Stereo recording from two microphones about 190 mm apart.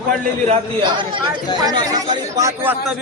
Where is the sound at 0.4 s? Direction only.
30° right (ahead or behind).